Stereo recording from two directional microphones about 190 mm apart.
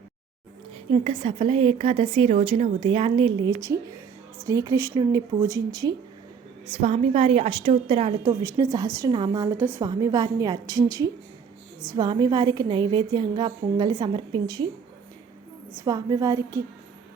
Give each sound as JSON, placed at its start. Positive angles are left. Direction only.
{"t": 0.9, "sound": "a woman's voice", "side_deg": -30}
{"t": 6.7, "sound": "a woman's voice", "side_deg": -35}
{"t": 8.2, "sound": "a woman's voice", "side_deg": -15}
{"t": 15.8, "sound": "a woman's voice", "side_deg": -15}